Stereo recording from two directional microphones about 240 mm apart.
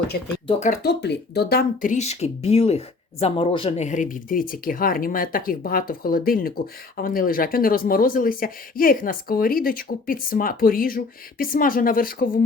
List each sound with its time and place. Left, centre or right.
0.4 s speech: left
0.8 s speech: left